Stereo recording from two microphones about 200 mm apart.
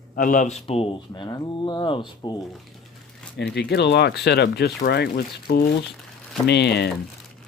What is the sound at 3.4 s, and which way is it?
Speech, 55° left (ahead or behind).